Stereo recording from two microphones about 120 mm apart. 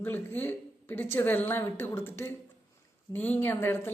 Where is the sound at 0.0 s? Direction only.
15° left (ahead or behind).